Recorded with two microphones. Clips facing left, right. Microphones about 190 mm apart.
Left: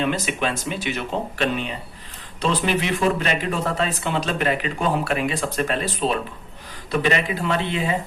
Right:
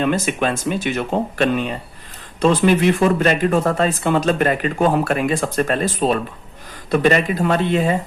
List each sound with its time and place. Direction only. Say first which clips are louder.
0.0 s speech: right 4 dB; 50° right (ahead or behind)